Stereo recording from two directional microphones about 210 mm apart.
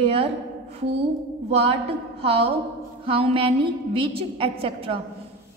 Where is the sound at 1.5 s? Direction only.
30° right (ahead or behind).